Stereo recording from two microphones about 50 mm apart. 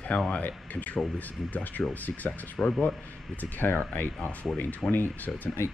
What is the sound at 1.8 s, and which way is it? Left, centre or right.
Speech, centre.